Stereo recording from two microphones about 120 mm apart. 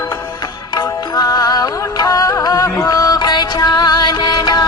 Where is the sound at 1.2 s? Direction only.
30° left (ahead or behind).